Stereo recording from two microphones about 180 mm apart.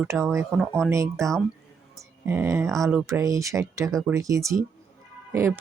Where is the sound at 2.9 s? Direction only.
15° right (ahead or behind).